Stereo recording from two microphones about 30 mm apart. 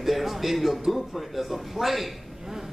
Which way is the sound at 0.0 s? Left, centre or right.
Centre.